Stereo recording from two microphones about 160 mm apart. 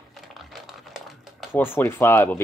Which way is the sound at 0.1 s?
Centre (ahead or behind).